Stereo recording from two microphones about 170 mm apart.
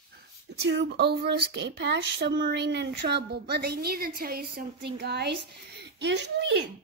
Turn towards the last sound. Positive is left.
turn(degrees=-90)